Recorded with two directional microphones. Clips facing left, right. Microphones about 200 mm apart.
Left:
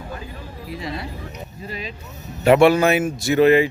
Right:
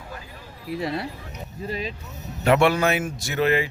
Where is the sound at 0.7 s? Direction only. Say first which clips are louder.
Right 3 dB; 60° right (ahead or behind).